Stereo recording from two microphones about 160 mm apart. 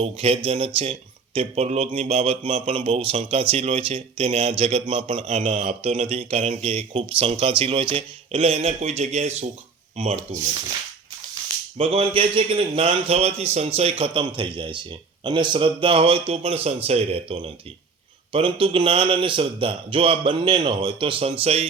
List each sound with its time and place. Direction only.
0.0 s speech: 35° right (ahead or behind)
11.8 s speech: 35° right (ahead or behind)